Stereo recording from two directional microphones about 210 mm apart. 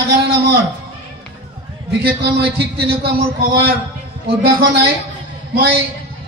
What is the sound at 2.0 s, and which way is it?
A man's voice, 50° right (ahead or behind).